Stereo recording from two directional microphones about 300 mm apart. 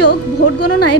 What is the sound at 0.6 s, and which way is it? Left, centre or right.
Speech, left.